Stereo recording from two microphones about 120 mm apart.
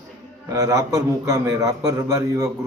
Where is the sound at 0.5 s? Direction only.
25° right (ahead or behind).